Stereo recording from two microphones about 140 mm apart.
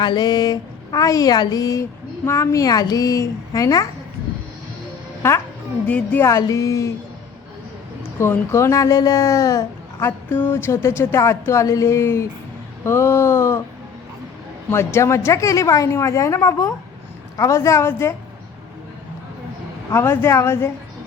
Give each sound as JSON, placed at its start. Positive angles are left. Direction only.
{"t": 0.0, "sound": "speech", "side_deg": 30}
{"t": 5.9, "sound": "speech", "side_deg": 10}
{"t": 6.2, "sound": "speech", "side_deg": 20}
{"t": 8.2, "sound": "speech", "side_deg": 20}
{"t": 10.1, "sound": "speech", "side_deg": 15}
{"t": 14.7, "sound": "speech", "side_deg": 20}
{"t": 19.9, "sound": "speech", "side_deg": 20}